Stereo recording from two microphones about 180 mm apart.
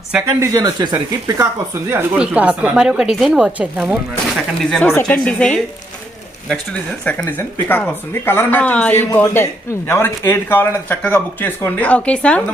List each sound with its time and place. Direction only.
0.1 s speech: 15° right (ahead or behind)
4.8 s speech: 10° left (ahead or behind)